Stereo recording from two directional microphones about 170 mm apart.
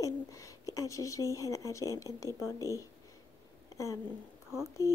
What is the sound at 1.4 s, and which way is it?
A woman's voice, 20° left (ahead or behind).